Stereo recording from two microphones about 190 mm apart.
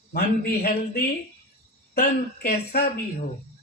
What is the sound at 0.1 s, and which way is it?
A man's voice, 50° left (ahead or behind).